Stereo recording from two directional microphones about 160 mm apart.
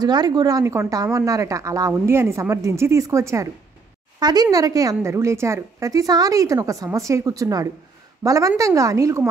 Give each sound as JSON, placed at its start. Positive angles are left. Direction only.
{"t": 0.0, "sound": "a woman's voice", "side_deg": -25}